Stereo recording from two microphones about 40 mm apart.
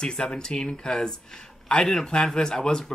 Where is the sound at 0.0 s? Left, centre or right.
Centre.